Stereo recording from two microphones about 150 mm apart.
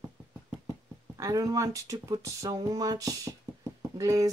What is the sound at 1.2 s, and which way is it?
Speech, 25° right (ahead or behind).